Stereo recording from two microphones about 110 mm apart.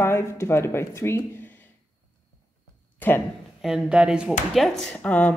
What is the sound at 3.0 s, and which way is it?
Speech, 15° left (ahead or behind).